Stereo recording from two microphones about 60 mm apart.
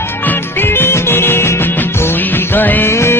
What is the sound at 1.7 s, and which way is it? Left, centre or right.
Music, left.